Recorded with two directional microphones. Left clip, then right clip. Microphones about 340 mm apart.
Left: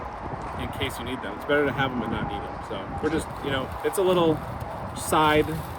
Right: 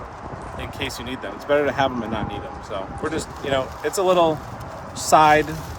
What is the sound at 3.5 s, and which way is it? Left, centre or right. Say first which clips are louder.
Speech: right 5 dB; centre.